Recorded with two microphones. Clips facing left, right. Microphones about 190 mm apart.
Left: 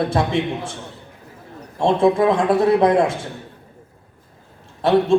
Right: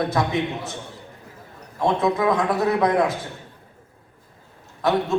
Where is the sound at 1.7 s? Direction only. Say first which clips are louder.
Left 5 dB; 30° left (ahead or behind).